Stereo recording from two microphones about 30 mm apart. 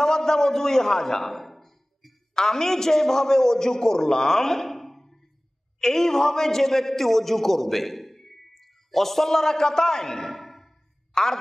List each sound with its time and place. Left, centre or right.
0.0 s a sound: centre
2.3 s a man's voice: centre
11.1 s a woman's voice: centre